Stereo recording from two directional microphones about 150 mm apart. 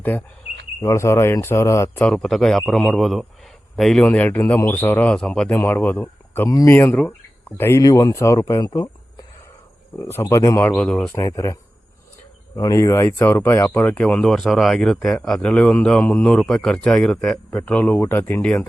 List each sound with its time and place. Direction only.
0.8 s speech: 20° left (ahead or behind)
2.0 s a man's voice: centre (ahead or behind)
7.6 s speech: 20° left (ahead or behind)
10.0 s speech: 15° left (ahead or behind)
10.8 s speech: 5° left (ahead or behind)
11.1 s speech: 20° left (ahead or behind)
12.5 s a man's voice: 20° left (ahead or behind)